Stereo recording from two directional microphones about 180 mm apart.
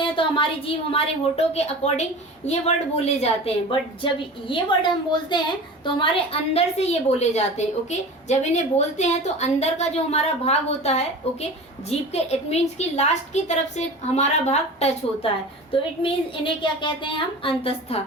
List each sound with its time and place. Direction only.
0.0 s a woman's voice: 30° left (ahead or behind)